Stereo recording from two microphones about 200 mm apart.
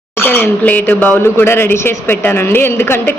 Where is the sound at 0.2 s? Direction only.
10° left (ahead or behind).